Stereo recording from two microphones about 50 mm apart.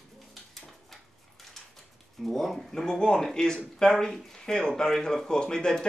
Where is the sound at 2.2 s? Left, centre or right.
Centre.